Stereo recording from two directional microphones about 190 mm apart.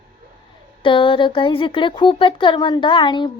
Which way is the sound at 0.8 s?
25° left (ahead or behind).